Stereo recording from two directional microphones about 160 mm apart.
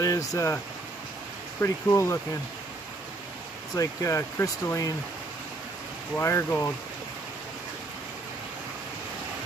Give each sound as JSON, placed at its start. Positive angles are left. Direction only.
{"t": 0.0, "sound": "speech", "side_deg": 20}
{"t": 1.6, "sound": "speech", "side_deg": 15}
{"t": 3.7, "sound": "speech", "side_deg": 20}
{"t": 6.1, "sound": "speech", "side_deg": 15}